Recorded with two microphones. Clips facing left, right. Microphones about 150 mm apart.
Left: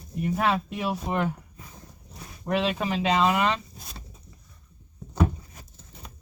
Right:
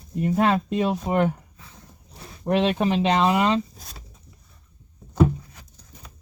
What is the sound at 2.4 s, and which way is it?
Speech, 30° right (ahead or behind).